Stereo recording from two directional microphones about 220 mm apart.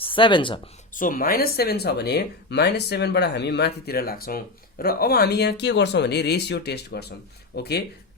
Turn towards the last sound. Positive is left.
turn(degrees=45)  # may be behind; listen again after turning